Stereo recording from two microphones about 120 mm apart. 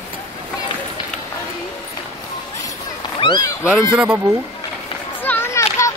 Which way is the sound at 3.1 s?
40° left (ahead or behind).